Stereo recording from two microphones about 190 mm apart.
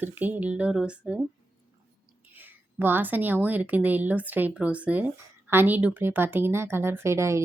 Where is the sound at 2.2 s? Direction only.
10° right (ahead or behind).